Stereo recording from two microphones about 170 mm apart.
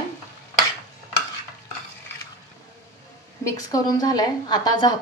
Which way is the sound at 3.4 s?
20° left (ahead or behind).